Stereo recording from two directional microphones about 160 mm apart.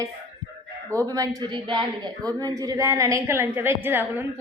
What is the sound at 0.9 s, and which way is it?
Speech, 20° right (ahead or behind).